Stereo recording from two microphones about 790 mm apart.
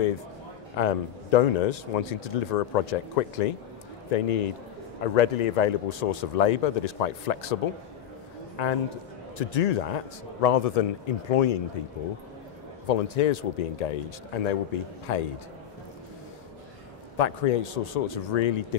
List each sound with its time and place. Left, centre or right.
0.7 s speech: left
8.6 s speech: left
12.8 s speech: left
17.2 s speech: left